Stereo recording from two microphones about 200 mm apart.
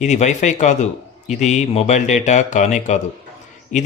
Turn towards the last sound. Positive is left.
turn(degrees=35)  # may be behind; listen again after turning